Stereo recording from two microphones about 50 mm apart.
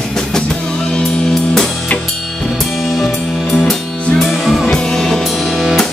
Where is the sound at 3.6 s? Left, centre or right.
Centre.